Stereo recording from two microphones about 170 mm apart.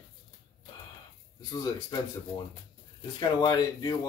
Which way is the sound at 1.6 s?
20° left (ahead or behind).